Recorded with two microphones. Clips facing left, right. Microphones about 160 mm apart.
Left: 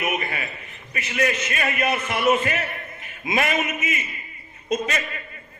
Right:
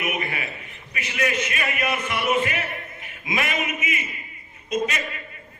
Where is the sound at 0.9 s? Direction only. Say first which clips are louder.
Left 1 dB; 35° left (ahead or behind).